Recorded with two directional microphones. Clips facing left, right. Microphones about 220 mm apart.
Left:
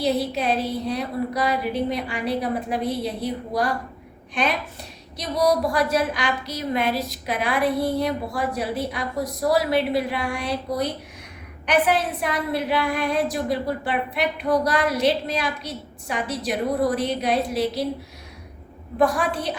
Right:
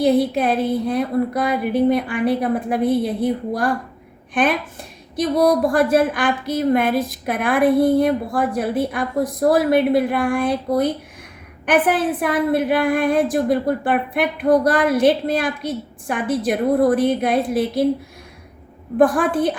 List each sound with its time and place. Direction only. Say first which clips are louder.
0.0 s a woman's voice: right 6 dB; 50° right (ahead or behind)
18.9 s a woman's voice: right 6 dB; 50° right (ahead or behind)